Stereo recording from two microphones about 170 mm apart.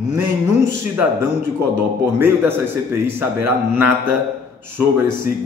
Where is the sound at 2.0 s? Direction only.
10° right (ahead or behind).